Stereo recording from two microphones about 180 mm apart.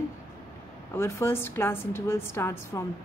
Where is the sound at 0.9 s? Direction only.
15° left (ahead or behind).